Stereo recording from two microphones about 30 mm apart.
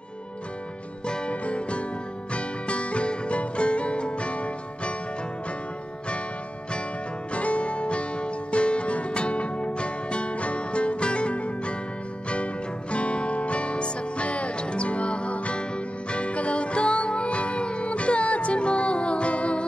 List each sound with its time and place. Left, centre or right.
1.0 s music: left
1.3 s music: left
7.3 s music: left
12.9 s music: left